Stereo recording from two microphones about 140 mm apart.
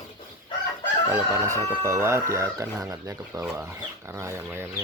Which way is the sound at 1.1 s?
20° right (ahead or behind).